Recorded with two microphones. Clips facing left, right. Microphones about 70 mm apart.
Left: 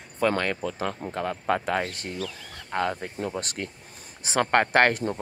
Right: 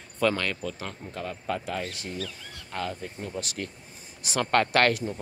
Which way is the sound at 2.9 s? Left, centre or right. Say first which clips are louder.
Left 4 dB; left.